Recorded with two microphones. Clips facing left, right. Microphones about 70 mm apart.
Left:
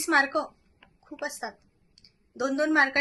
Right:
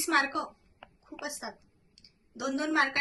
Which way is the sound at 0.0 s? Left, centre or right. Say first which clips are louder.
Left 4 dB; left.